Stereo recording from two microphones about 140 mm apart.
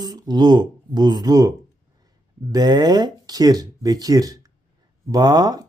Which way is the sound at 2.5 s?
30° right (ahead or behind).